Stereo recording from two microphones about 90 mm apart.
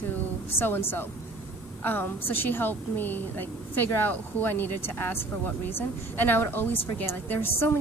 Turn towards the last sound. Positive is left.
turn(degrees=25)  # may be behind; listen again after turning